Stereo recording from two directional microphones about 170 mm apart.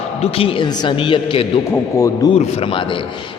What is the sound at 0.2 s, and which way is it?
A man's voice, 35° left (ahead or behind).